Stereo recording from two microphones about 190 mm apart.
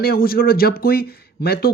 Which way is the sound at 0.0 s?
50° left (ahead or behind).